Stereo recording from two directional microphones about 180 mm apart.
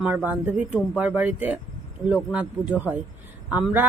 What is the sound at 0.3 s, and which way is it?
Speech, 10° right (ahead or behind).